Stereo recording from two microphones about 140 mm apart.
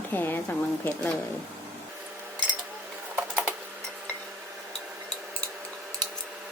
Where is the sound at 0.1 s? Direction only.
15° left (ahead or behind).